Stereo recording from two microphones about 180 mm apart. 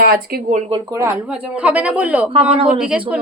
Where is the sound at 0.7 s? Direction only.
20° right (ahead or behind).